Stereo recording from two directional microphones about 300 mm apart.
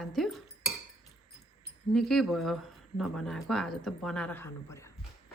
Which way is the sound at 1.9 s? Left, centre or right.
Centre.